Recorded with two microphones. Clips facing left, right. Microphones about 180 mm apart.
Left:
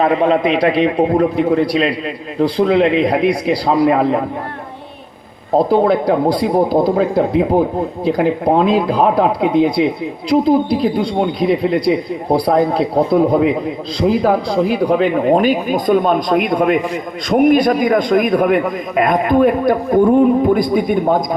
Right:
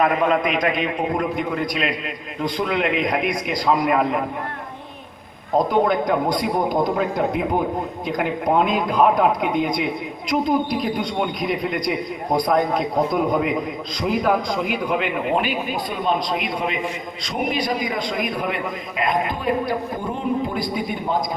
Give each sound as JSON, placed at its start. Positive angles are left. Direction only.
{"t": 0.0, "sound": "speech", "side_deg": 30}
{"t": 5.5, "sound": "a man's voice", "side_deg": 30}